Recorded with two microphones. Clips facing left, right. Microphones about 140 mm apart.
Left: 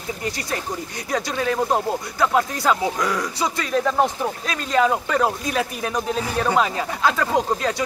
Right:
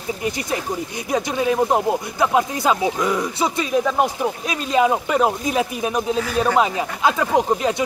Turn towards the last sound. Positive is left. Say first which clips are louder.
# right 3 dB
turn(degrees=-15)  # may be behind; listen again after turning